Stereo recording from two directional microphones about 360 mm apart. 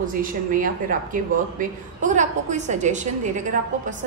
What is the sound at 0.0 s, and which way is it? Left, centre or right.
Speech, right.